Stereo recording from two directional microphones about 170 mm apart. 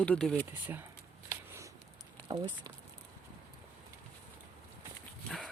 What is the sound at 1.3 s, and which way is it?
Shuffling cards, 15° right (ahead or behind).